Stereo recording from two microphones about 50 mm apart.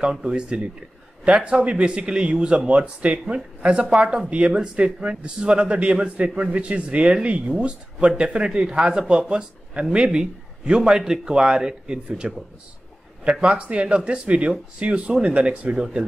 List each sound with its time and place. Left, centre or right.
0.0 s speech: centre
13.3 s speech: right